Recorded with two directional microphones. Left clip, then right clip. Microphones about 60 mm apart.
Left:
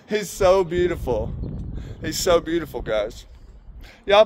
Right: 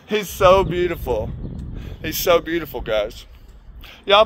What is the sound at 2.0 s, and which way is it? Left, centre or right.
Speech, centre.